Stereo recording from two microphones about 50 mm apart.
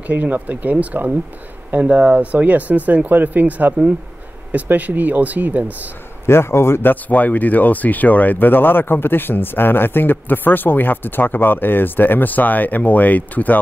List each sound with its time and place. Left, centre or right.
0.0 s speech: right
6.2 s a man's voice: left
6.8 s speech: left